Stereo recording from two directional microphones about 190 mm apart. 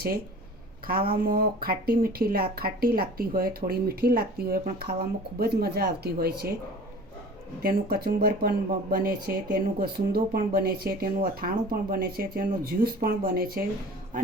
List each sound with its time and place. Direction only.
1.1 s speech: 50° right (ahead or behind)
7.6 s speech: 50° right (ahead or behind)